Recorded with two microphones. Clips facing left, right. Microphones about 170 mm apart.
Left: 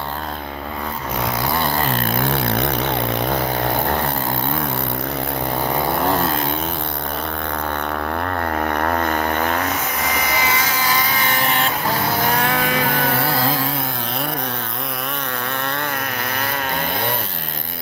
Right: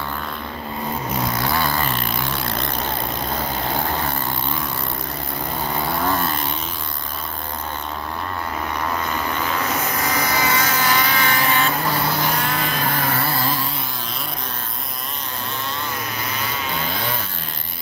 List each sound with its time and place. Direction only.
1.8 s vehicle: 60° left (ahead or behind)
8.5 s vehicle: 60° left (ahead or behind)
10.3 s a sound: 5° left (ahead or behind)
12.3 s vehicle: 65° left (ahead or behind)